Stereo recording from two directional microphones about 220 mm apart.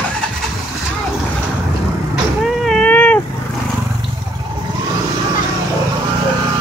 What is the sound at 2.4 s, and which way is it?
Cat, centre (ahead or behind).